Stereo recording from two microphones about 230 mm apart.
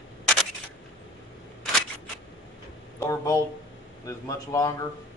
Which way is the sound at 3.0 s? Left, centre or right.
Centre.